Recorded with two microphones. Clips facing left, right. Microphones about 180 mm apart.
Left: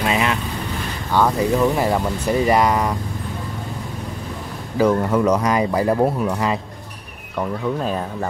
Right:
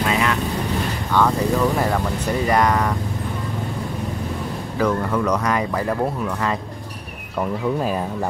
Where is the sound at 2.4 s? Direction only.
10° left (ahead or behind).